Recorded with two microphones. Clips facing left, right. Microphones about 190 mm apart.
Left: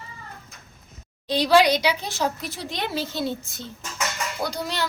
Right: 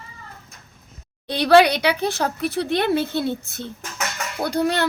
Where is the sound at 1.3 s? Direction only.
60° right (ahead or behind).